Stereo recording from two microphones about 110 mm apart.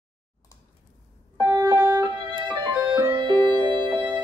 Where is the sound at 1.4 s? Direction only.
20° right (ahead or behind).